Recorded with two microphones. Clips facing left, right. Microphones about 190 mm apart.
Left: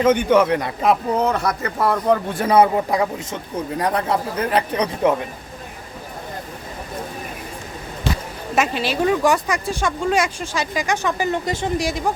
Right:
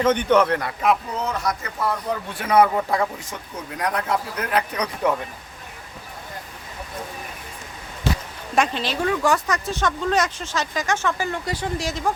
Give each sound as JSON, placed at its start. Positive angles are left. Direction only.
{"t": 0.0, "sound": "speech", "side_deg": 10}
{"t": 1.1, "sound": "speech", "side_deg": 60}
{"t": 2.3, "sound": "speech", "side_deg": 40}
{"t": 2.6, "sound": "speech", "side_deg": 20}
{"t": 8.5, "sound": "speech", "side_deg": 5}